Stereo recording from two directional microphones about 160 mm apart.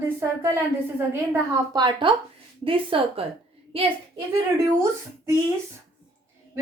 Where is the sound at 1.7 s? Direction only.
30° right (ahead or behind).